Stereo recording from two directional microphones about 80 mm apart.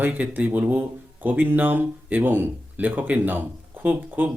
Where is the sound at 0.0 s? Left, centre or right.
Right.